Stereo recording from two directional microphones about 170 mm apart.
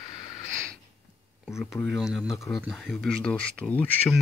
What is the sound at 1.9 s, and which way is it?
Speech, centre (ahead or behind).